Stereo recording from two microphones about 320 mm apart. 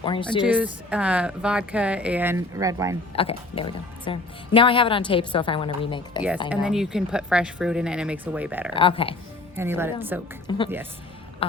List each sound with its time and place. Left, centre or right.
0.0 s a woman's voice: centre
0.4 s speech: centre
3.2 s a woman's voice: centre
6.7 s speech: centre
8.7 s a woman's voice: centre
9.6 s speech: centre
10.5 s a woman's voice: centre